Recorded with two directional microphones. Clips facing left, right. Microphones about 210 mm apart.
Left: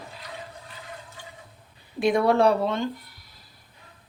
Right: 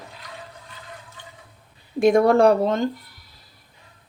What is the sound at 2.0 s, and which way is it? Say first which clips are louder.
Speech: right 5 dB; 45° right (ahead or behind).